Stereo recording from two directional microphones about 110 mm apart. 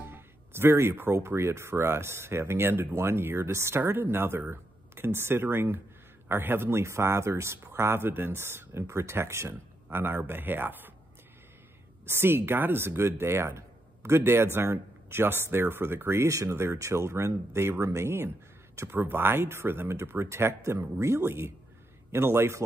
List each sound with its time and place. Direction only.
0.0 s speech: 20° right (ahead or behind)
12.1 s speech: 20° right (ahead or behind)